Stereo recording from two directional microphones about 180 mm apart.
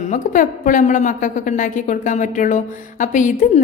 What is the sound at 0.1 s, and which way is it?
A woman's voice, 45° left (ahead or behind).